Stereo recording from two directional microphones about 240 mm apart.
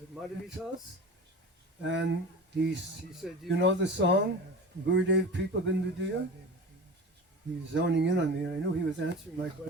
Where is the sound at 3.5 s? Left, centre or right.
Right.